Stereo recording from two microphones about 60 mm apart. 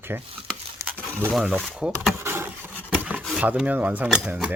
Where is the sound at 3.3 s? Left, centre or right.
Right.